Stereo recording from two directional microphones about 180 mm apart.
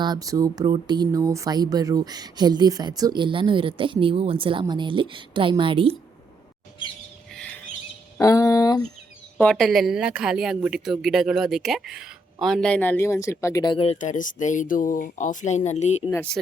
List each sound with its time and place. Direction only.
0.0 s speech: 20° right (ahead or behind)
8.2 s a sound: 20° left (ahead or behind)
9.4 s a woman's voice: 5° left (ahead or behind); by 14.0 s 30° left (ahead or behind)
14.0 s speech: 45° left (ahead or behind)
16.0 s speech: 15° left (ahead or behind)